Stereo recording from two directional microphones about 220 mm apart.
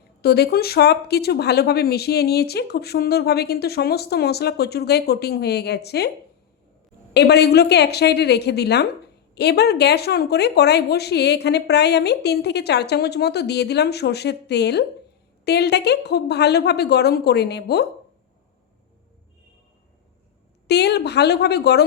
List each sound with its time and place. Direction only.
0.2 s speech: 45° left (ahead or behind)
7.1 s speech: 50° left (ahead or behind)
20.7 s speech: 50° left (ahead or behind)